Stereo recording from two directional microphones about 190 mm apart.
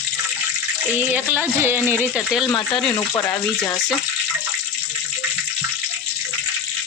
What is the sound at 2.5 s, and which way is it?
Speech, 20° left (ahead or behind).